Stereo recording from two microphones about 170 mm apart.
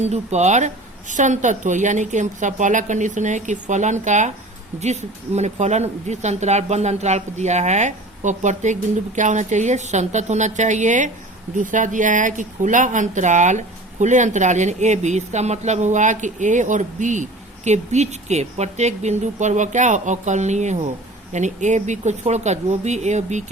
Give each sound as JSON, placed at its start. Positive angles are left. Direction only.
{"t": 0.0, "sound": "speech", "side_deg": -40}